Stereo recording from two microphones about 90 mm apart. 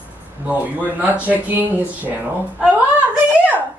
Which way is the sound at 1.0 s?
20° right (ahead or behind).